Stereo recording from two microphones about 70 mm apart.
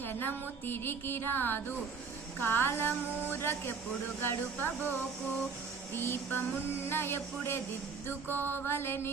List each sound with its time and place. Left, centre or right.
0.0 s music: left
4.2 s speech: left
5.9 s music: left